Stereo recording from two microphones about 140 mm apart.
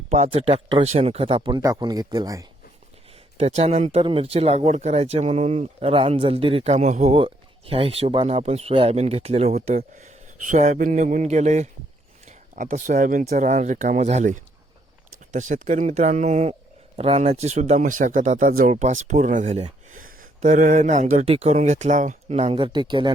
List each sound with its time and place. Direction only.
0.1 s speech: 50° right (ahead or behind)
1.5 s speech: 30° right (ahead or behind)
3.3 s speech: 50° right (ahead or behind); by 13.2 s 70° right (ahead or behind)
13.3 s speech: 60° right (ahead or behind)
19.9 s speech: 75° right (ahead or behind); by 21.5 s 45° right (ahead or behind)
21.5 s speech: 60° right (ahead or behind); by 23.1 s 35° right (ahead or behind)